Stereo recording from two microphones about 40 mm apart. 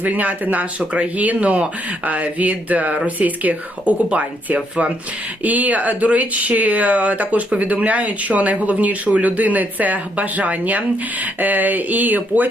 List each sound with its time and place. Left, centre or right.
0.0 s speech: right